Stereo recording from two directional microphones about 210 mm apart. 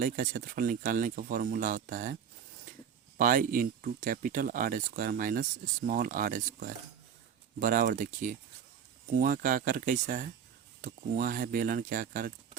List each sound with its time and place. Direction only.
0.0 s speech: 40° right (ahead or behind)
3.2 s speech: 40° right (ahead or behind)